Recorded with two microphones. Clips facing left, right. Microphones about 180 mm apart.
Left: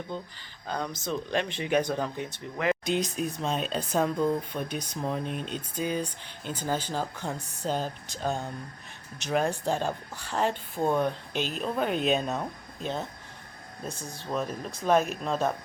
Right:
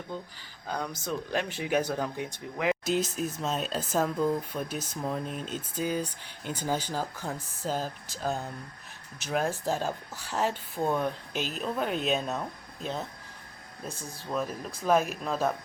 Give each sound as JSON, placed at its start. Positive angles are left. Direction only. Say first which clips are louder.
{"t": 0.7, "sound": "speech", "louder": "left 1 dB", "side_deg": -10}
{"t": 14.3, "sound": "speech", "louder": "left 1 dB", "side_deg": 0}